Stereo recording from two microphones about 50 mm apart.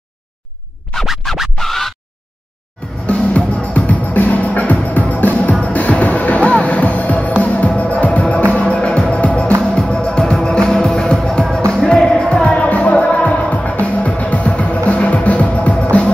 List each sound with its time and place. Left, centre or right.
1.0 s music: centre
3.1 s music: left